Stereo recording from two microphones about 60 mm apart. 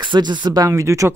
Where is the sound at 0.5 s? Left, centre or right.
Right.